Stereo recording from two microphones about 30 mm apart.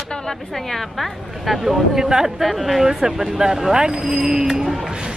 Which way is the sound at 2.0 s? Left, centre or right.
Right.